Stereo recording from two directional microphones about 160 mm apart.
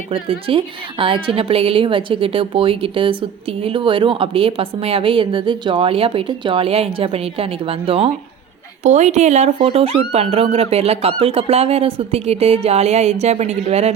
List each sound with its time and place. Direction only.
0.1 s a woman's voice: 35° right (ahead or behind)